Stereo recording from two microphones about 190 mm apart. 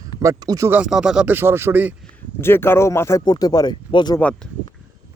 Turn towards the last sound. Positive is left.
turn(degrees=25)  # may be behind; listen again after turning